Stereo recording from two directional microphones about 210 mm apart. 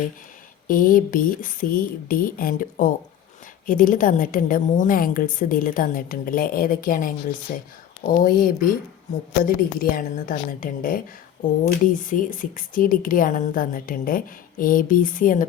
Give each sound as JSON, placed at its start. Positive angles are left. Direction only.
{"t": 0.7, "sound": "a woman's voice", "side_deg": 40}